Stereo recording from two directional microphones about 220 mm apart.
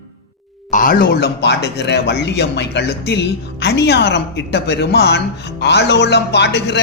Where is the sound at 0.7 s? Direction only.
40° left (ahead or behind).